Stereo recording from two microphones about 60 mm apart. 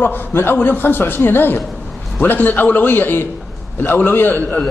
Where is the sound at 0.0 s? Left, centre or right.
Left.